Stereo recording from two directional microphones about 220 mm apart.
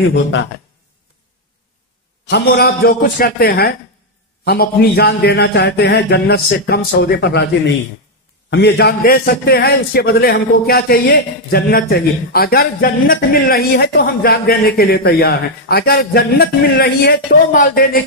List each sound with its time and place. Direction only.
2.2 s a man's voice: 45° left (ahead or behind)